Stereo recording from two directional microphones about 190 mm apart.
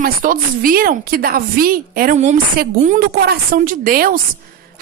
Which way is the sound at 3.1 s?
55° right (ahead or behind).